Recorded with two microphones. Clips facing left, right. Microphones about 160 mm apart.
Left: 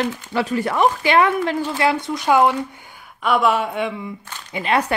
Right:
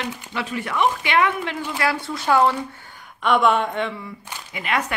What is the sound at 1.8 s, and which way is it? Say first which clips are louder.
Speech: left 4 dB; 20° left (ahead or behind).